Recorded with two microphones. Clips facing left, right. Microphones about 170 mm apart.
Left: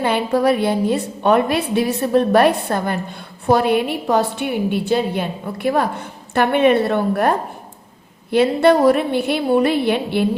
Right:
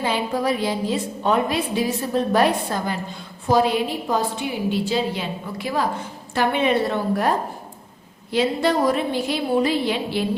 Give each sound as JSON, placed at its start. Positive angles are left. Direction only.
{"t": 0.0, "sound": "a woman's voice", "side_deg": 60}